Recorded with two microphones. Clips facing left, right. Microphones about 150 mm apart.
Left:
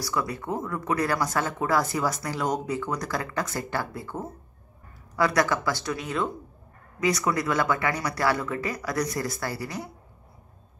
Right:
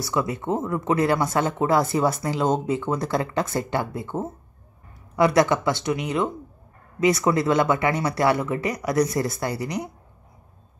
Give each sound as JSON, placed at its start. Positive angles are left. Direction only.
{"t": 0.0, "sound": "speech", "side_deg": -25}